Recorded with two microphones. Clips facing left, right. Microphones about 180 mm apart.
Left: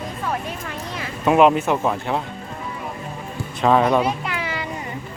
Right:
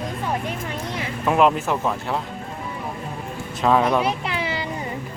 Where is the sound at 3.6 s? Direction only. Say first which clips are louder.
Left 2 dB; centre (ahead or behind).